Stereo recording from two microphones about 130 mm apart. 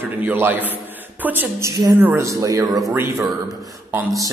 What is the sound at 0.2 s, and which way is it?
A man's voice, 15° right (ahead or behind).